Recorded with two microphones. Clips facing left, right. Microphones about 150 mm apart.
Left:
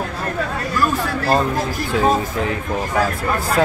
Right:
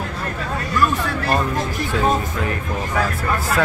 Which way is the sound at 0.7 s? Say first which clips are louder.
Even; 35° left (ahead or behind).